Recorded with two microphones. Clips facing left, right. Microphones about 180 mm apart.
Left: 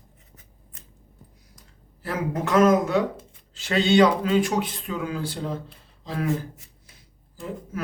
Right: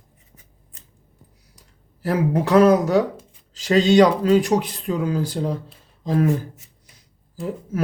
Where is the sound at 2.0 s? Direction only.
35° right (ahead or behind).